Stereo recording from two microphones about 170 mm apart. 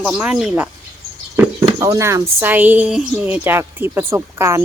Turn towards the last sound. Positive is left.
turn(degrees=-15)  # may be behind; listen again after turning